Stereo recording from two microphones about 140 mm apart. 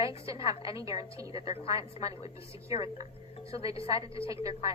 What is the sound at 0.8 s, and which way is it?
Speech, 25° right (ahead or behind).